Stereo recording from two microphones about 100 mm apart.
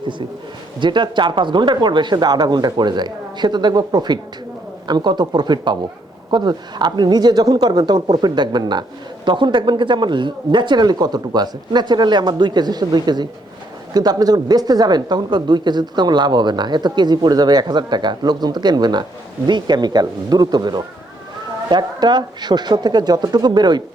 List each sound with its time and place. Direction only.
0.8 s speech: 50° right (ahead or behind)